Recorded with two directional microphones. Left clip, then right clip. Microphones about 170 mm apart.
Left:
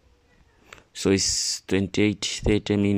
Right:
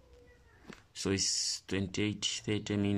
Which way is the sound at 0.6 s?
25° left (ahead or behind).